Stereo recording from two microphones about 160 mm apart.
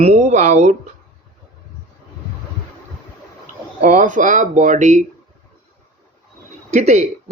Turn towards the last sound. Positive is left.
turn(degrees=-45)  # may be behind; listen again after turning